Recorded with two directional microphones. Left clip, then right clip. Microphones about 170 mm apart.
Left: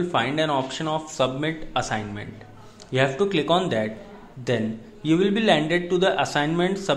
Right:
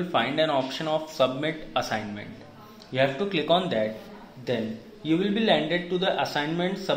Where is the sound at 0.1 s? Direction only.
20° left (ahead or behind).